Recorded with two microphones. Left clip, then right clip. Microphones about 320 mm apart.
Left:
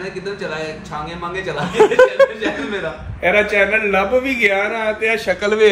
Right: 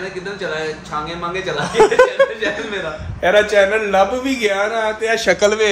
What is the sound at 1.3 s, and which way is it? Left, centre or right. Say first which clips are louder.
A man's voice: right 2 dB; centre.